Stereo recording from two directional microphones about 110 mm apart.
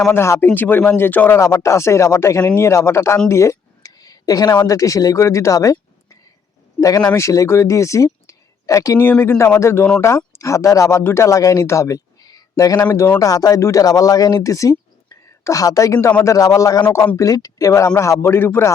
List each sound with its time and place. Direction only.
0.1 s speech: 25° left (ahead or behind)
6.7 s speech: 30° left (ahead or behind)
7.0 s speech: 15° left (ahead or behind)
9.0 s speech: 15° left (ahead or behind)
9.4 s speech: 25° left (ahead or behind)